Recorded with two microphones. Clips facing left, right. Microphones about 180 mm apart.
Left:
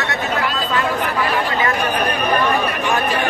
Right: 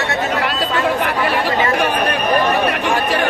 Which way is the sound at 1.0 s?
65° right (ahead or behind).